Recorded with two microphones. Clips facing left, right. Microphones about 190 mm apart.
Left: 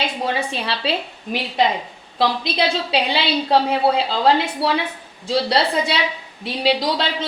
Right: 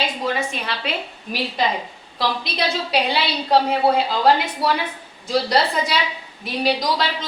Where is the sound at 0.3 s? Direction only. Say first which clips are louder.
Left 2 dB; 30° left (ahead or behind).